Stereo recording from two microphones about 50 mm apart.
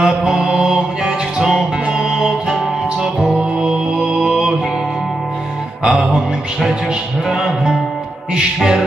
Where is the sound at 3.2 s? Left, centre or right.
Right.